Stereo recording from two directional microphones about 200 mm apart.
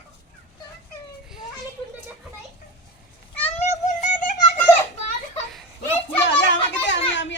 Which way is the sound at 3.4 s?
35° left (ahead or behind).